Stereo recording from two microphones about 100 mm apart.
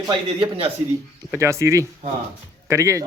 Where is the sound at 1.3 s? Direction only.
30° right (ahead or behind).